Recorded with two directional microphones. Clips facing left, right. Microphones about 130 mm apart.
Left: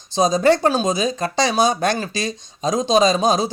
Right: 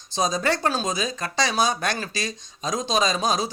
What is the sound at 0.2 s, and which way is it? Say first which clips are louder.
Speech: left 8 dB; 25° left (ahead or behind).